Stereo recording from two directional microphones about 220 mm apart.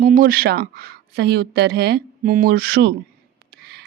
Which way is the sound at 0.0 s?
40° right (ahead or behind).